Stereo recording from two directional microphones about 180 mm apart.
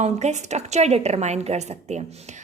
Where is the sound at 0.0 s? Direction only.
40° right (ahead or behind).